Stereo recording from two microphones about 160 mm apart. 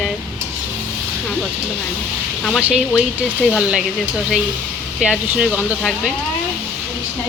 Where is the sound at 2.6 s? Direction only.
5° right (ahead or behind).